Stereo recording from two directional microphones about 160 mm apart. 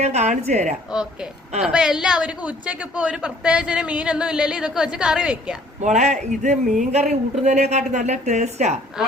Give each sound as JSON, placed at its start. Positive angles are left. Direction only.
{"t": 0.0, "sound": "speech", "side_deg": -45}
{"t": 0.9, "sound": "a woman's voice", "side_deg": -5}
{"t": 5.8, "sound": "speech", "side_deg": -45}